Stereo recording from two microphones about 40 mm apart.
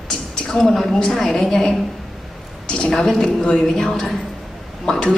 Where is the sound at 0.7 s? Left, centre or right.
Centre.